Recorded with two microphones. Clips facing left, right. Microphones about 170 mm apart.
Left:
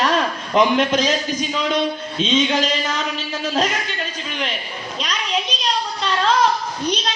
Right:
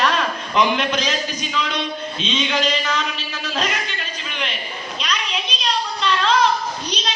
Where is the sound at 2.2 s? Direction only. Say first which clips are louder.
Left 7 dB; 45° left (ahead or behind).